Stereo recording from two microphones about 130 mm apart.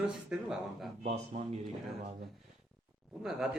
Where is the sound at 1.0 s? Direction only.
60° right (ahead or behind).